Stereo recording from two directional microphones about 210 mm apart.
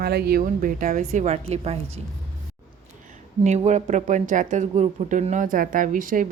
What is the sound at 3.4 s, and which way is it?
Speech, 35° right (ahead or behind).